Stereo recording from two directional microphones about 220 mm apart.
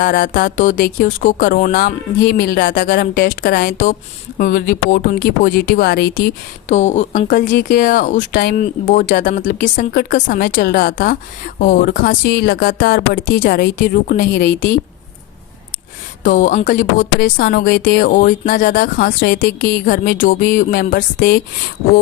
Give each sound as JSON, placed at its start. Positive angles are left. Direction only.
{"t": 0.0, "sound": "speech", "side_deg": 40}
{"t": 6.7, "sound": "speech", "side_deg": 30}
{"t": 16.2, "sound": "speech", "side_deg": 40}